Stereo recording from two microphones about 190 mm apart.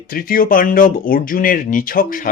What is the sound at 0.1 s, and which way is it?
Speech, 50° left (ahead or behind).